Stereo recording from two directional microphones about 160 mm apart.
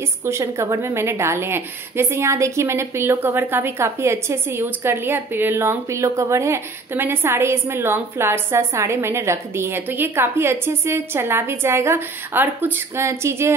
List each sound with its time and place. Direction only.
0.2 s a woman's voice: 15° right (ahead or behind)